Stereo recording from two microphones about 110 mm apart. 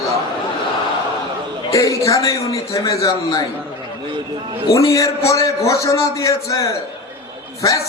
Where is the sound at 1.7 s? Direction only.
30° left (ahead or behind).